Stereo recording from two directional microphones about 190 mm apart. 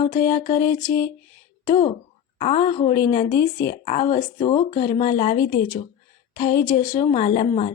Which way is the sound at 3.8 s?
40° left (ahead or behind).